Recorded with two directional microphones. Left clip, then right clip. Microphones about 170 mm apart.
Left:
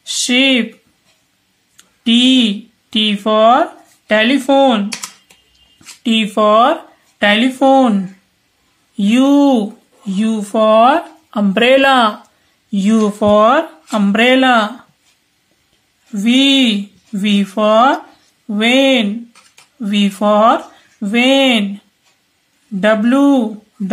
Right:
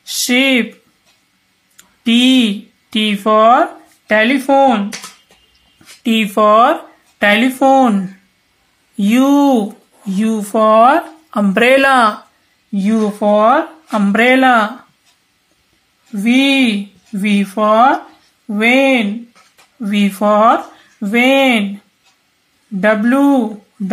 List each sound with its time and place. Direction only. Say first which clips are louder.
0.0 s a sound: left 1 dB; 5° left (ahead or behind)
1.8 s speech: left 1 dB; 5° left (ahead or behind)
6.0 s speech: right 1 dB; 5° left (ahead or behind)
12.7 s speech: left 2 dB; 30° left (ahead or behind)
13.8 s speech: right 1 dB; 15° left (ahead or behind)
16.1 s speech: left 1 dB; 20° left (ahead or behind)
22.8 s speech: even; 15° left (ahead or behind)